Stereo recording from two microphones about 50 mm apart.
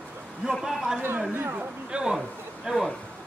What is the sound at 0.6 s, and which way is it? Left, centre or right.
A man's voice, centre.